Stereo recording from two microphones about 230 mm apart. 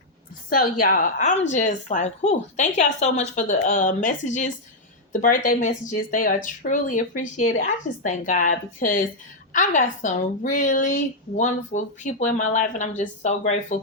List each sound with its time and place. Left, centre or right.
0.5 s a woman's voice: left